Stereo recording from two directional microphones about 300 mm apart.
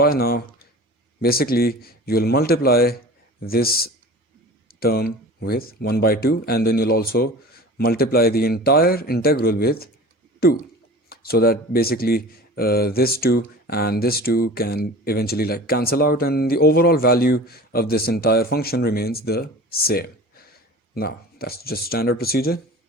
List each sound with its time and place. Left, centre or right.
0.0 s speech: left